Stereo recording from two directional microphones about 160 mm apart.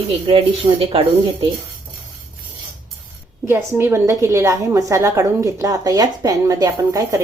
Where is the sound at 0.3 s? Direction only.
35° right (ahead or behind).